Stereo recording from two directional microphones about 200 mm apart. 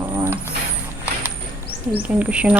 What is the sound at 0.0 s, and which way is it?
Vehicle, 15° right (ahead or behind).